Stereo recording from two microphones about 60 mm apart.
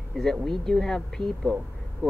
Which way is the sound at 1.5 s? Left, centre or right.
Left.